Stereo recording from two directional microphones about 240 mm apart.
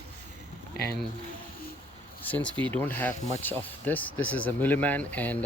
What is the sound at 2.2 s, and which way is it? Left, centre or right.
Speech, centre.